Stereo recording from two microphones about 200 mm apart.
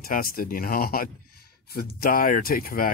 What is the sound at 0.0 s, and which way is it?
Speech, 45° left (ahead or behind).